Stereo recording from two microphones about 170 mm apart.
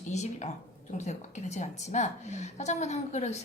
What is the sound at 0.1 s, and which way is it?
A woman's voice, 40° left (ahead or behind).